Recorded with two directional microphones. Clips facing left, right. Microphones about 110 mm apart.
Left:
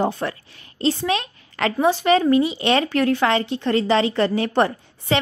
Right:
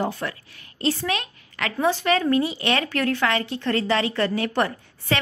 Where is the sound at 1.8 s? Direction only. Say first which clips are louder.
Left 4 dB; 15° left (ahead or behind).